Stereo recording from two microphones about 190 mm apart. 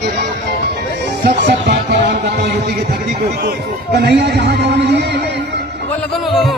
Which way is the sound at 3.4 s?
60° right (ahead or behind).